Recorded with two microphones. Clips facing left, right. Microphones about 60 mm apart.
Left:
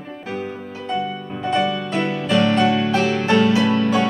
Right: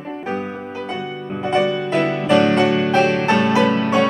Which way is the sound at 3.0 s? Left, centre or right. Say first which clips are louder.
Right 2 dB; right.